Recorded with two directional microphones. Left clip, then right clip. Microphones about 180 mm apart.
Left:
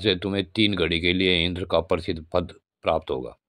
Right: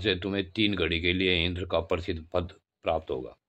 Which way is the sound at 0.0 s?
30° left (ahead or behind).